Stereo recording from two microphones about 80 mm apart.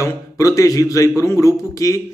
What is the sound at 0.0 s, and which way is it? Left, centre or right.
Speech, left.